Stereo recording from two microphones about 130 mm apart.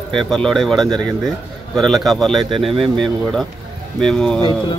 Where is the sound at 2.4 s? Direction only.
45° right (ahead or behind).